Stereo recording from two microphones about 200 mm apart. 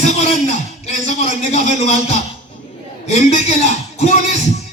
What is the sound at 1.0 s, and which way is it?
A man's voice, 35° left (ahead or behind).